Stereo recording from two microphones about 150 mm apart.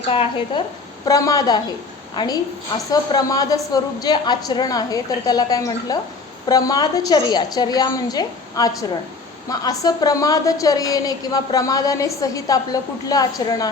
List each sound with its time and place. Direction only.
0.1 s a woman's voice: 35° left (ahead or behind)
1.0 s a woman's voice: 25° left (ahead or behind)